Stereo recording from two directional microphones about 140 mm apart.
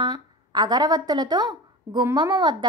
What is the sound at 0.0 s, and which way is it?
A woman's voice, 30° right (ahead or behind).